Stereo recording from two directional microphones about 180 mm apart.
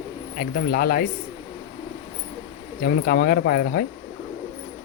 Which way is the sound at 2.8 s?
60° left (ahead or behind).